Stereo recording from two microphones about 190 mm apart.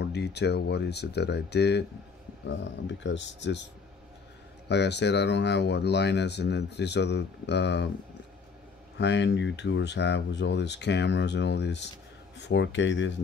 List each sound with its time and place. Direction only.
0.0 s speech: 60° left (ahead or behind)
4.6 s speech: 65° left (ahead or behind)
8.9 s speech: 65° left (ahead or behind)